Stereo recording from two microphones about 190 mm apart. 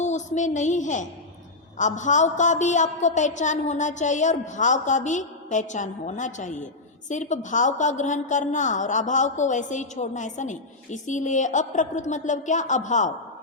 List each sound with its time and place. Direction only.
0.0 s a woman's voice: 40° left (ahead or behind)